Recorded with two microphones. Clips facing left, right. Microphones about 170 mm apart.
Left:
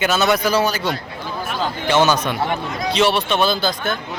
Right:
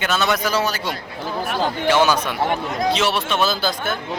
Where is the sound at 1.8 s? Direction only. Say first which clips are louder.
Left 1 dB; 5° right (ahead or behind).